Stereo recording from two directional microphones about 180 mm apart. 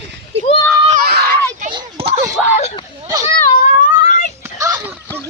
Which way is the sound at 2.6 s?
35° left (ahead or behind).